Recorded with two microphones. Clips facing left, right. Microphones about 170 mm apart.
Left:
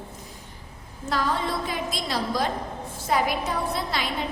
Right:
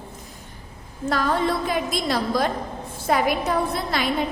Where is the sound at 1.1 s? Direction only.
55° right (ahead or behind).